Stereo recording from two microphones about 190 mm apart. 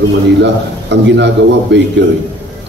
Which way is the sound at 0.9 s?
65° right (ahead or behind).